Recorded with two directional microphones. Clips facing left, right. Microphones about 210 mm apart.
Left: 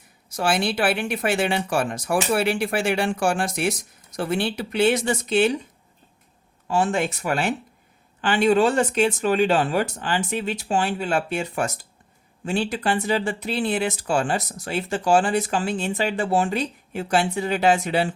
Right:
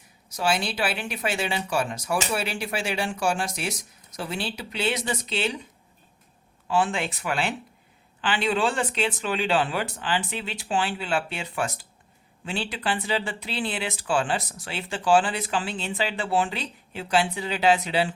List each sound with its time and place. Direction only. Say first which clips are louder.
0.3 s speech: left 4 dB; 55° left (ahead or behind)
6.7 s speech: left 3 dB; 45° left (ahead or behind)